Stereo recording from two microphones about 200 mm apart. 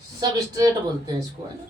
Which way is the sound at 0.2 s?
20° right (ahead or behind).